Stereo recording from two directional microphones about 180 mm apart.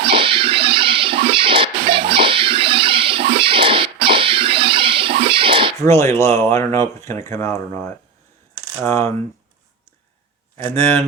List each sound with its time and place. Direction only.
0.0 s music: 30° right (ahead or behind)
5.8 s speech: 15° left (ahead or behind)
8.8 s speech: 15° left (ahead or behind)
10.6 s speech: 10° left (ahead or behind)